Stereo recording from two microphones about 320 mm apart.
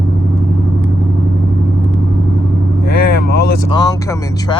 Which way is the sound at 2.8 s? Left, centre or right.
Left.